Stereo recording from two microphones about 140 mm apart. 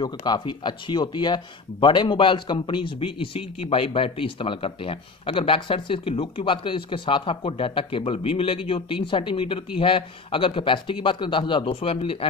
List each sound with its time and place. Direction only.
0.0 s speech: 30° left (ahead or behind)